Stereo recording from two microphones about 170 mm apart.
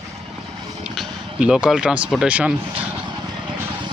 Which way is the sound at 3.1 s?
25° right (ahead or behind).